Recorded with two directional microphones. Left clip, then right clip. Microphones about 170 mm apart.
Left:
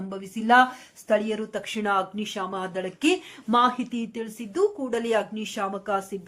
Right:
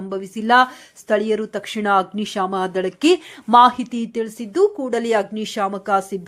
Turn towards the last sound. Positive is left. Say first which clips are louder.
# right 8 dB
turn(degrees=-40)  # may be behind; listen again after turning